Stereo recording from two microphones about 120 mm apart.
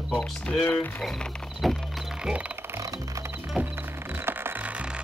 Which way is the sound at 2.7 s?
30° right (ahead or behind).